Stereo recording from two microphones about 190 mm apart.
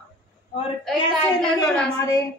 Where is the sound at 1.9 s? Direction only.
15° left (ahead or behind).